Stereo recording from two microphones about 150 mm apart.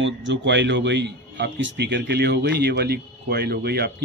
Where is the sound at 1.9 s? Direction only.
90° right.